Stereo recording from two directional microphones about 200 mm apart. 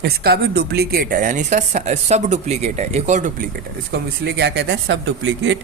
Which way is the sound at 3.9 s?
55° right (ahead or behind).